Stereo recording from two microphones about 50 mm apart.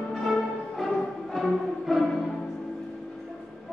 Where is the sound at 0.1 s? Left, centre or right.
Centre.